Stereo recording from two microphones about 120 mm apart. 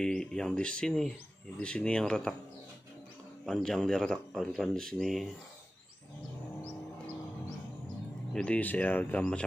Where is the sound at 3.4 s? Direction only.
5° left (ahead or behind).